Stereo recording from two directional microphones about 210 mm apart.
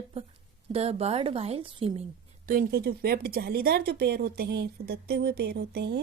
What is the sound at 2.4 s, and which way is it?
A woman's voice, 45° right (ahead or behind).